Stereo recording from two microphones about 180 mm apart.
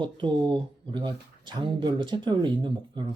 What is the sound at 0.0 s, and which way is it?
Speech, 25° right (ahead or behind).